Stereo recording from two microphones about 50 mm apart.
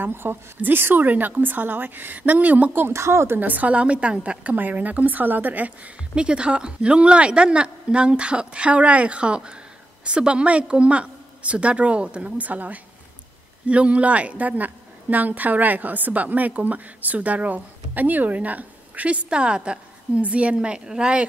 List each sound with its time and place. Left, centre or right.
0.0 s a woman's voice: right
2.9 s speech: right
3.3 s a woman's voice: right
6.1 s a woman's voice: centre